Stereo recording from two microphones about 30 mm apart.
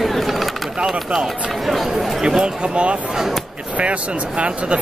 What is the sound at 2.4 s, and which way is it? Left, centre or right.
Speech, right.